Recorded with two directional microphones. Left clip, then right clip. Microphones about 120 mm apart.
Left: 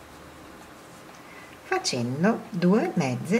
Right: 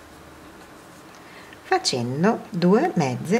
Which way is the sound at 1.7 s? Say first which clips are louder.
Right 5 dB; 25° right (ahead or behind).